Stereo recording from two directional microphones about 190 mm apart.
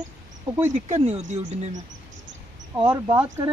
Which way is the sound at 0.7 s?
35° right (ahead or behind).